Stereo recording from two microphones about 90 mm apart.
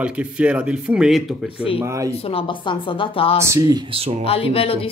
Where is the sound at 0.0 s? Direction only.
15° right (ahead or behind).